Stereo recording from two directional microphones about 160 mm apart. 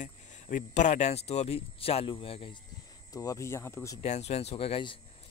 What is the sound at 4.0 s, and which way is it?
Speech, 40° left (ahead or behind).